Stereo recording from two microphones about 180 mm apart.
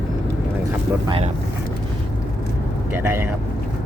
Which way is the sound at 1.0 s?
30° right (ahead or behind).